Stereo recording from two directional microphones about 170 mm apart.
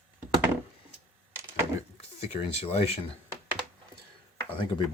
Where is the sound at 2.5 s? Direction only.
40° left (ahead or behind).